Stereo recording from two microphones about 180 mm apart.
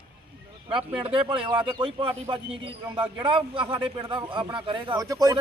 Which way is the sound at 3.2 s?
30° right (ahead or behind).